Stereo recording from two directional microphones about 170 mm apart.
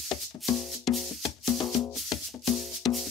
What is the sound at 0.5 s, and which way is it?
Music, centre (ahead or behind).